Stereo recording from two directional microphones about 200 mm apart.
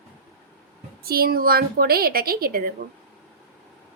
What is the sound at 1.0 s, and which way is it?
A woman's voice, 50° right (ahead or behind).